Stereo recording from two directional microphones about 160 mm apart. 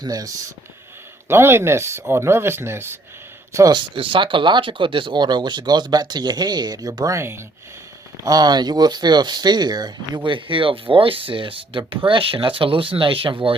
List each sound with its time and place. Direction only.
0.0 s speech: 25° right (ahead or behind)